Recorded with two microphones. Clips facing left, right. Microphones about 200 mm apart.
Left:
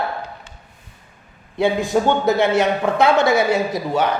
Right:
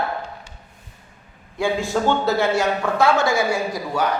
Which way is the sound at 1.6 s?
20° left (ahead or behind).